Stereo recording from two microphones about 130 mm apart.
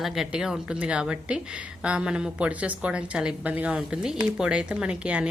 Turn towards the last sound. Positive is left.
turn(degrees=-10)  # may be behind; listen again after turning